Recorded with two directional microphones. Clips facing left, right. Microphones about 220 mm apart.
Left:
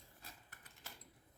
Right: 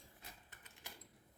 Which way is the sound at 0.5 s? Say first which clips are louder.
Right 1 dB; 20° right (ahead or behind).